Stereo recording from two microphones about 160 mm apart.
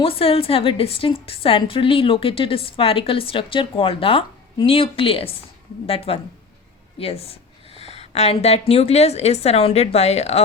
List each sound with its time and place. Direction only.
0.0 s a woman's voice: 35° left (ahead or behind)